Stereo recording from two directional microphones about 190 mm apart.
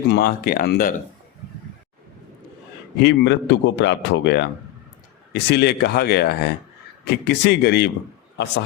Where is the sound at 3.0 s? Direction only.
65° left (ahead or behind).